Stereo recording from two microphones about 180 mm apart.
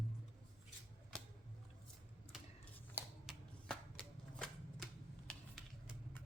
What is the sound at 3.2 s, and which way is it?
Typewriter, centre (ahead or behind).